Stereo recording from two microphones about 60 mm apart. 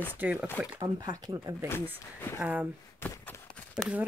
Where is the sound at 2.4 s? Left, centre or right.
Right.